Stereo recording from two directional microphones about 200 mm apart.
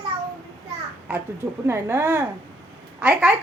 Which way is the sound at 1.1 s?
5° right (ahead or behind).